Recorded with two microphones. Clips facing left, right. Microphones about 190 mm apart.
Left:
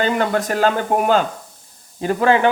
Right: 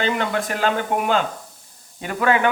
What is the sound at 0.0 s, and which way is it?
Speech, 45° left (ahead or behind).